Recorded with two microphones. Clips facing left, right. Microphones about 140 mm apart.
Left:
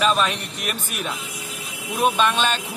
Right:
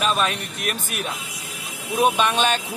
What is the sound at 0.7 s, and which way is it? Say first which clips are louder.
Speech: right 1 dB; 45° right (ahead or behind).